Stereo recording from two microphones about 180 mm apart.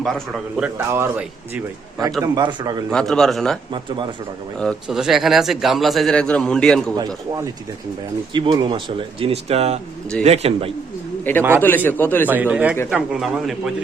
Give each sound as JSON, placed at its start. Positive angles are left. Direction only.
{"t": 0.0, "sound": "speech", "side_deg": 0}
{"t": 2.2, "sound": "speech", "side_deg": -25}
{"t": 2.9, "sound": "speech", "side_deg": 5}
{"t": 3.7, "sound": "speech", "side_deg": -25}
{"t": 4.5, "sound": "speech", "side_deg": 0}
{"t": 8.3, "sound": "speech", "side_deg": -25}
{"t": 11.3, "sound": "a man's voice", "side_deg": 10}
{"t": 12.3, "sound": "a man's voice", "side_deg": -10}